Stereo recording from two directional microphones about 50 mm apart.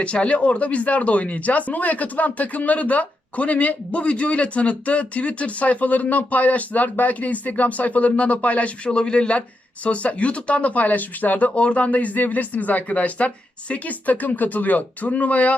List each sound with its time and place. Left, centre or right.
0.0 s speech: left